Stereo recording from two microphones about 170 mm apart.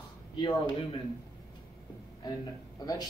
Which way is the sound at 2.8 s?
25° left (ahead or behind).